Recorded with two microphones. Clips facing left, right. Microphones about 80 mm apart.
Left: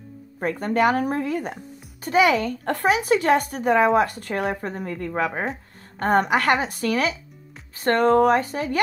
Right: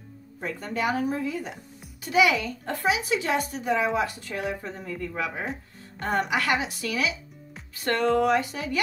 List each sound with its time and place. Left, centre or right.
0.4 s speech: left
2.6 s speech: left